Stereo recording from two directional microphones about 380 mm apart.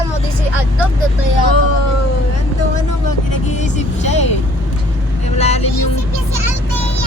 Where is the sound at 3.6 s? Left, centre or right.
Centre.